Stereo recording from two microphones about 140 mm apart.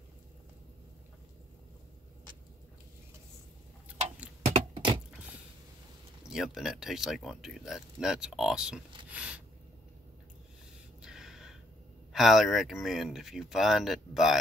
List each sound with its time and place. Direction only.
4.6 s a sound: 40° right (ahead or behind)
6.2 s speech: 5° right (ahead or behind)
11.0 s gasp: 5° right (ahead or behind)
12.1 s speech: centre (ahead or behind)